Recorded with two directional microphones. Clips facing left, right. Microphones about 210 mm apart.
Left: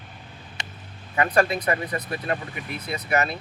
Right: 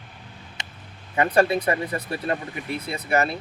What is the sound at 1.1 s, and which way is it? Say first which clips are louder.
Speech: right 2 dB; 30° right (ahead or behind).